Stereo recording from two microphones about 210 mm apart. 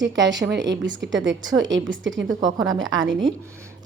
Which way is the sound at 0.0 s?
60° right (ahead or behind).